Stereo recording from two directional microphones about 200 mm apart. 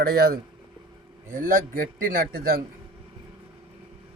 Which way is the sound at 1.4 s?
45° right (ahead or behind).